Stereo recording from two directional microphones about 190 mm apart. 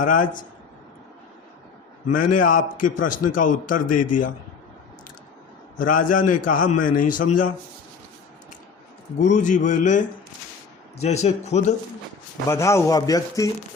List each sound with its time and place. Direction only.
0.0 s a man's voice: 45° left (ahead or behind)
2.4 s a man's voice: 45° left (ahead or behind)
5.7 s a man's voice: 45° left (ahead or behind)
9.1 s a man's voice: 40° left (ahead or behind)
11.0 s a man's voice: 35° left (ahead or behind)
12.5 s a man's voice: 15° left (ahead or behind)